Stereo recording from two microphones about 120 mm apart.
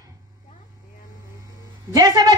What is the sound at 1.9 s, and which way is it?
Speech, 30° right (ahead or behind).